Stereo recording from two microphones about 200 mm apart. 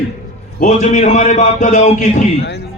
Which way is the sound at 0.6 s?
35° left (ahead or behind).